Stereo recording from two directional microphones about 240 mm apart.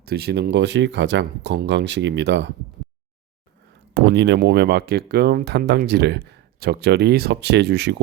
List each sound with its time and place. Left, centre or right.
0.0 s speech: right
3.9 s speech: right